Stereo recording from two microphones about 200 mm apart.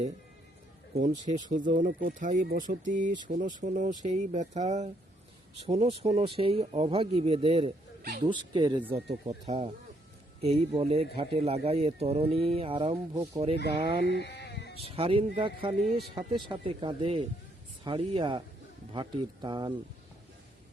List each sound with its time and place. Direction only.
1.2 s speech: 35° right (ahead or behind)
13.8 s speech: 55° right (ahead or behind)
14.1 s sheep: 55° left (ahead or behind)
14.8 s speech: 30° right (ahead or behind)